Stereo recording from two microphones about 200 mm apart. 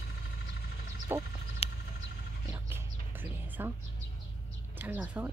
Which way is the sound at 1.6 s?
30° left (ahead or behind).